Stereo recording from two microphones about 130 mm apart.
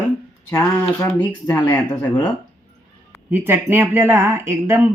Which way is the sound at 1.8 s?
15° left (ahead or behind).